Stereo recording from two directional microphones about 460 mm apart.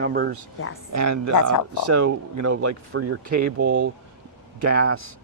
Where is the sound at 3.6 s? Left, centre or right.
Centre.